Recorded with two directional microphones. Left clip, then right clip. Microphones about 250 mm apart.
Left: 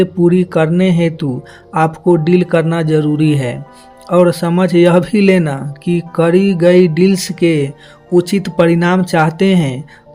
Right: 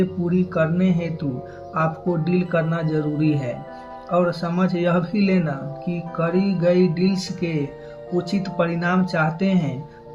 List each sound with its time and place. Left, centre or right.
0.0 s a man's voice: left